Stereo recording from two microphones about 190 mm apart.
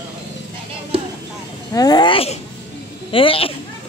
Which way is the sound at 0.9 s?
30° right (ahead or behind).